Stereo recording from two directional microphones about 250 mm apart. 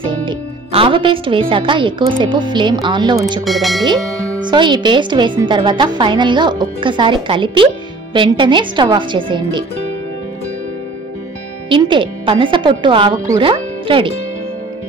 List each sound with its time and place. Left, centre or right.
0.0 s a woman's voice: centre
3.4 s speech: centre
4.5 s a woman's voice: centre
11.7 s a woman's voice: centre